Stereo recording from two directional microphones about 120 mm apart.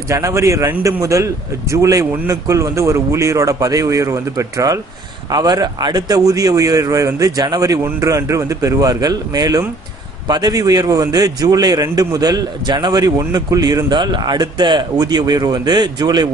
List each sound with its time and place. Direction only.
0.1 s a man's voice: 25° right (ahead or behind)